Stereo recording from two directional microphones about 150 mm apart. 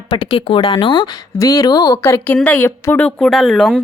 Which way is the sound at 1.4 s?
20° left (ahead or behind).